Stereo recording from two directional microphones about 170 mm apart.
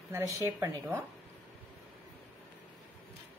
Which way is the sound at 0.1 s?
15° right (ahead or behind).